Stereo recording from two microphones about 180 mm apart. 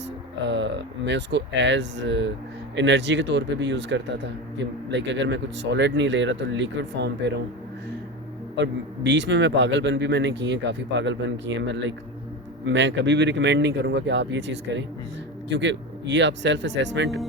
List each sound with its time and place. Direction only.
0.4 s a man's voice: 85° right
8.5 s a man's voice: 80° right